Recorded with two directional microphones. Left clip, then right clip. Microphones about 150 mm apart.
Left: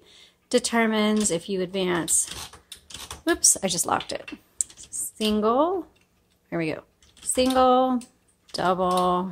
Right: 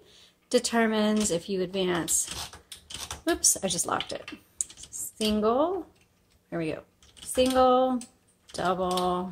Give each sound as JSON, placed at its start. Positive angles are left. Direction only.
{"t": 0.0, "sound": "speech", "side_deg": 25}
{"t": 3.3, "sound": "speech", "side_deg": 30}
{"t": 6.5, "sound": "typing", "side_deg": 35}